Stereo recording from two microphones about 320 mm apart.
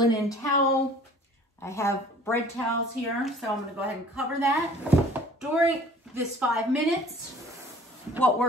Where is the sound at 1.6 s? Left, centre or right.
Centre.